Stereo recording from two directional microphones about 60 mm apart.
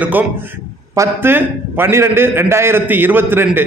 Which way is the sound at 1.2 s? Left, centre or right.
Right.